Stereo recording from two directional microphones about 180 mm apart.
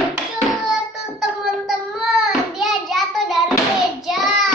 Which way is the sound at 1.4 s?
Centre (ahead or behind).